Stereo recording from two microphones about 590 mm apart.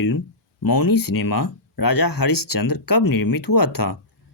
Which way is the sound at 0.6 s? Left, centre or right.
Left.